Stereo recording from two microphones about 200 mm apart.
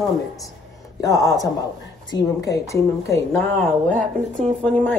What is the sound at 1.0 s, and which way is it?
Speech, 15° left (ahead or behind).